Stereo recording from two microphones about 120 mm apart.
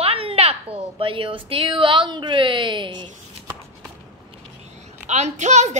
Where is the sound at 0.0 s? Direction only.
50° right (ahead or behind).